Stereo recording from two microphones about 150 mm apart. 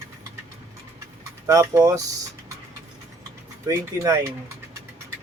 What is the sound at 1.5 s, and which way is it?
Speech, 20° right (ahead or behind).